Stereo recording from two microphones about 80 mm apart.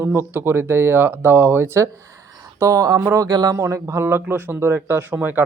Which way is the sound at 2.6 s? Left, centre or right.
Right.